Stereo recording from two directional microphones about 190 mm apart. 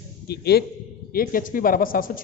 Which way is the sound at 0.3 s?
55° left (ahead or behind).